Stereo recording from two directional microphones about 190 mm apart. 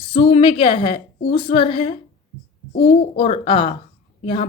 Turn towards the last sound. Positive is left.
turn(degrees=30)  # may be behind; listen again after turning